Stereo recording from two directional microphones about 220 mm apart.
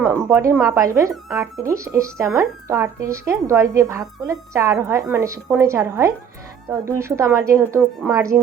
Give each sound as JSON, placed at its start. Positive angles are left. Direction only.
{"t": 0.0, "sound": "a woman's voice", "side_deg": -10}